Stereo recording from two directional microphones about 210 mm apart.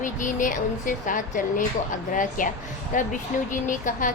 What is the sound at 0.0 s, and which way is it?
Speech, 40° left (ahead or behind).